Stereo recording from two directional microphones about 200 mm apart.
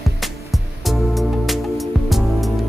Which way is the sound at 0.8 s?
Centre (ahead or behind).